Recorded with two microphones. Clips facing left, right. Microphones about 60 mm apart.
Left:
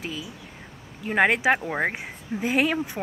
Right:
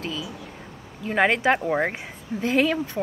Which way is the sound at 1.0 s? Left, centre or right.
Centre.